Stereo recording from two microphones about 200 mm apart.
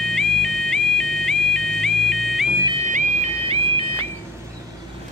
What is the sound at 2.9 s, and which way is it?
Bagpipes, 35° right (ahead or behind).